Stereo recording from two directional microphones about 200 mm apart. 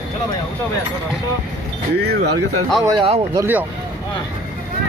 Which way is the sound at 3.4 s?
10° right (ahead or behind).